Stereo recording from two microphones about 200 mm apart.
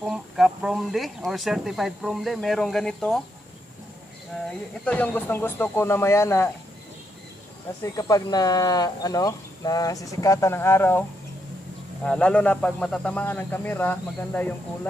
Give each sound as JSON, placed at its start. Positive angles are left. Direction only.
{"t": 0.0, "sound": "speech", "side_deg": 0}
{"t": 4.8, "sound": "speech", "side_deg": 10}
{"t": 7.8, "sound": "speech", "side_deg": 20}